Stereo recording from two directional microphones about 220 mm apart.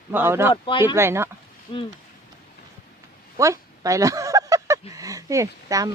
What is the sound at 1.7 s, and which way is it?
Speech, 25° left (ahead or behind).